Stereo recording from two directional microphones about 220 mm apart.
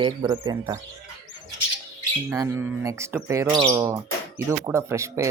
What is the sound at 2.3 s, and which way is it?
Speech, 15° right (ahead or behind).